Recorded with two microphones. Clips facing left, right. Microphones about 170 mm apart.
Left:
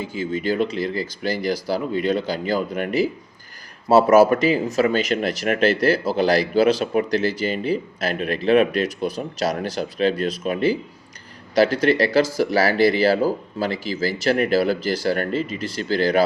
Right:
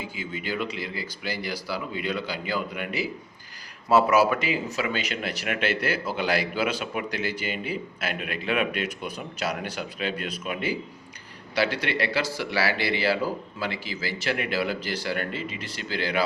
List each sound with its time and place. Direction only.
0.0 s speech: 40° left (ahead or behind)